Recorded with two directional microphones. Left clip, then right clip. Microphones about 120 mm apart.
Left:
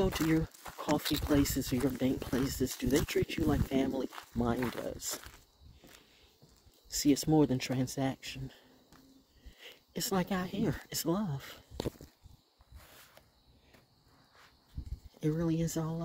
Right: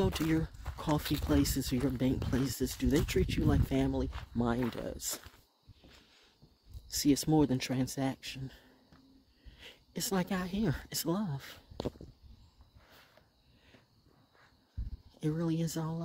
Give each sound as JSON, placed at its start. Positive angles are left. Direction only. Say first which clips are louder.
{"t": 0.0, "sound": "speech", "louder": "left 1 dB", "side_deg": -30}
{"t": 6.9, "sound": "speech", "louder": "left 1 dB", "side_deg": -35}
{"t": 15.1, "sound": "speech", "louder": "left 2 dB", "side_deg": -20}